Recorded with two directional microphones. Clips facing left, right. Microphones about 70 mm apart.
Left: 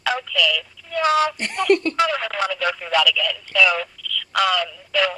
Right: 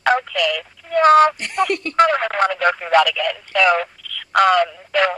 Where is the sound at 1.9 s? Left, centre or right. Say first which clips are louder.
Right 6 dB; right.